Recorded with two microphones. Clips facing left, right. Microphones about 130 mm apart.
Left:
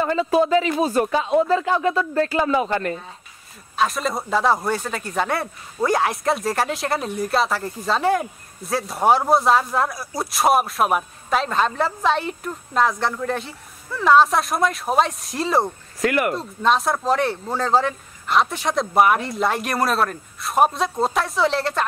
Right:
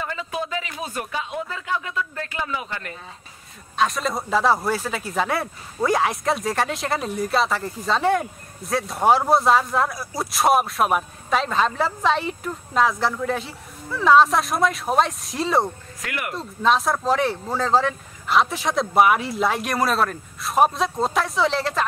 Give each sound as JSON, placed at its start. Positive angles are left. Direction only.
{"t": 0.0, "sound": "speech", "side_deg": 40}
{"t": 3.7, "sound": "speech", "side_deg": 0}
{"t": 16.0, "sound": "speech", "side_deg": 40}
{"t": 16.3, "sound": "speech", "side_deg": 0}